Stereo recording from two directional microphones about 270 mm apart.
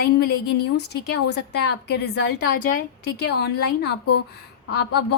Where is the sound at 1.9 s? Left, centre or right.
Left.